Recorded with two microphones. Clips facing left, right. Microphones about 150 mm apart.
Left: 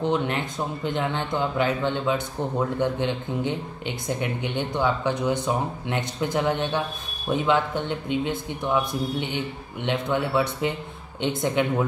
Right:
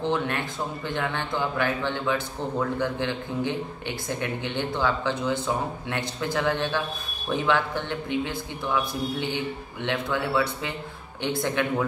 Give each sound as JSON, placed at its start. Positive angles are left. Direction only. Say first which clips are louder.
{"t": 0.0, "sound": "a man's voice", "louder": "left 2 dB", "side_deg": 20}